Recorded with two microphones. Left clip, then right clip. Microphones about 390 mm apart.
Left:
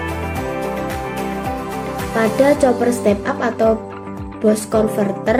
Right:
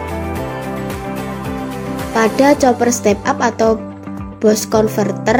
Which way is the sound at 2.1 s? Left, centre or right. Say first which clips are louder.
Right 2 dB; centre.